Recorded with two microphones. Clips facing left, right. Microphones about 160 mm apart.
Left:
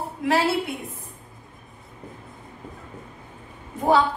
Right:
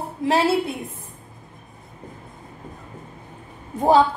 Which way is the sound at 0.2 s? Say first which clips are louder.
Right 2 dB; 30° right (ahead or behind).